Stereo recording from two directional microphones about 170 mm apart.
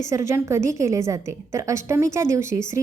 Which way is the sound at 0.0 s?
15° right (ahead or behind).